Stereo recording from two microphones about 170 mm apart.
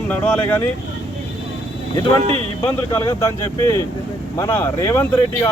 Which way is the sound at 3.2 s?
15° left (ahead or behind).